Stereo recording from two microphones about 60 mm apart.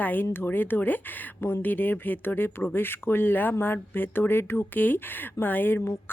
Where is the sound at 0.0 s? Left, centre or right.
Left.